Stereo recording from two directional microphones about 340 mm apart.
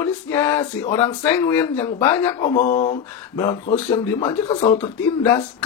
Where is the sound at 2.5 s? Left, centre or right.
Left.